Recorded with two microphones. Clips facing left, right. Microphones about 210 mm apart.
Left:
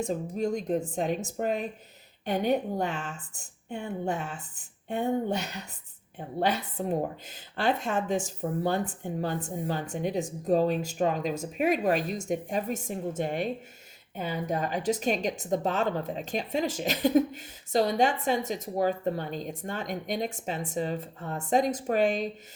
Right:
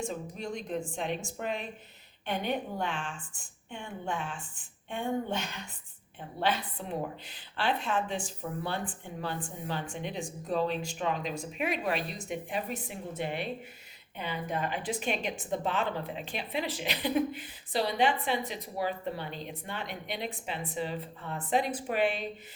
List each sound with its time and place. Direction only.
0.0 s a woman's voice: 40° left (ahead or behind)